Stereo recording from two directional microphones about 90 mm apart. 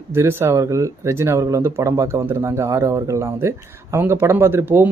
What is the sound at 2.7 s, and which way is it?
Speech, 35° right (ahead or behind).